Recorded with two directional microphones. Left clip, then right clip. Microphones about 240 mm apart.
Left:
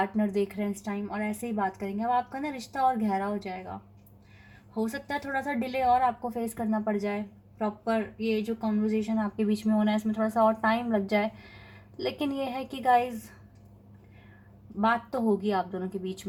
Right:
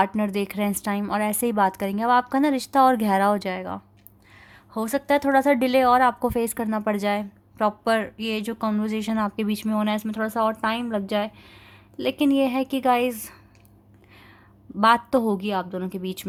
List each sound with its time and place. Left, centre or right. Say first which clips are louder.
0.0 s a woman's voice: right 5 dB; right
4.8 s speech: right 10 dB; right
6.4 s a woman's voice: right 5 dB; right
12.5 s a woman's voice: right 4 dB; right
14.8 s a woman's voice: right 8 dB; right